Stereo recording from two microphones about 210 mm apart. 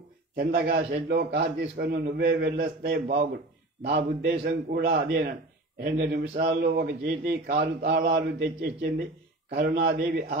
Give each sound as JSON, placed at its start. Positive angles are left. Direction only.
{"t": 0.4, "sound": "a man's voice", "side_deg": -45}